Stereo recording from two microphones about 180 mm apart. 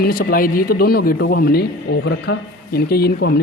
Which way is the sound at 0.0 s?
55° left (ahead or behind).